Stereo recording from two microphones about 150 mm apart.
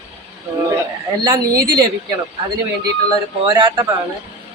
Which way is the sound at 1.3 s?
30° right (ahead or behind).